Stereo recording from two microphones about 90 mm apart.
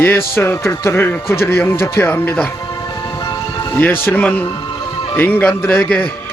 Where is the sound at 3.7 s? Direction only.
20° left (ahead or behind).